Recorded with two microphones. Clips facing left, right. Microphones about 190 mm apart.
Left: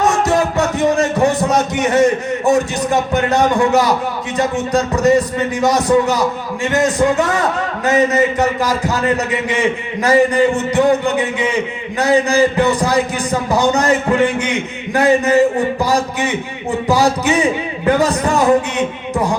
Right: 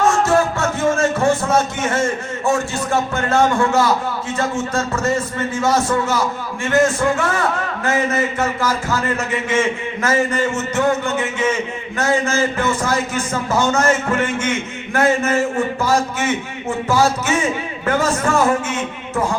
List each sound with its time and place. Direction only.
0.0 s a man's voice: 15° left (ahead or behind)